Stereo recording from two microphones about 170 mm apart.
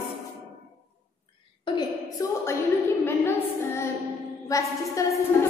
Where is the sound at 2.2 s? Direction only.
20° left (ahead or behind).